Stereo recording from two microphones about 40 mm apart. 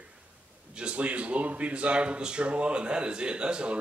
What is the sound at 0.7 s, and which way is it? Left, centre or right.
Speech, right.